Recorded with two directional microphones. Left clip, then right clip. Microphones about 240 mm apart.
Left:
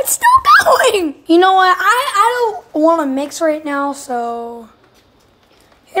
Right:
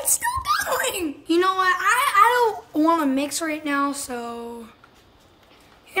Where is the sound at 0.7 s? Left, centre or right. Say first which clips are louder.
Left 12 dB; centre.